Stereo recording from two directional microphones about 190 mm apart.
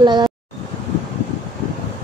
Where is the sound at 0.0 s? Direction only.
25° right (ahead or behind).